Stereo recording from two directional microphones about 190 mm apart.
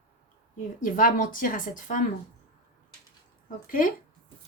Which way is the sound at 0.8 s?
45° left (ahead or behind).